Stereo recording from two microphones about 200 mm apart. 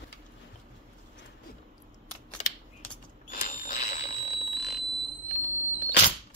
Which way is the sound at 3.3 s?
40° left (ahead or behind).